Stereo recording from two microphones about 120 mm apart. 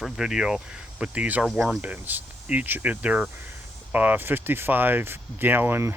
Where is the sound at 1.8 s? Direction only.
15° right (ahead or behind).